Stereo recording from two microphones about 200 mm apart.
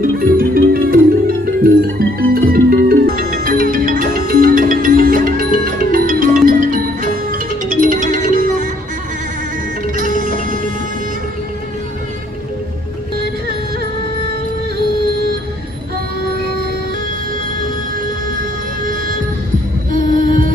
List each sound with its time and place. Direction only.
0.0 s music: 45° right (ahead or behind)
10.0 s music: 40° right (ahead or behind)
19.9 s a sound: 40° right (ahead or behind)